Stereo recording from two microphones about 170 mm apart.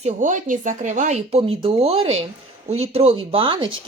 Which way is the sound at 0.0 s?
45° right (ahead or behind).